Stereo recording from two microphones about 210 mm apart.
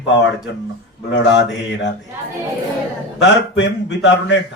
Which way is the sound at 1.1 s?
60° left (ahead or behind).